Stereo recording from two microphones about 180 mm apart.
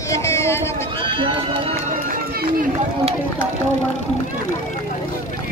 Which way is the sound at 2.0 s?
50° right (ahead or behind).